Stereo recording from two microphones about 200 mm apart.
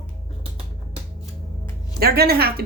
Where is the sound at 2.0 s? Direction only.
50° right (ahead or behind).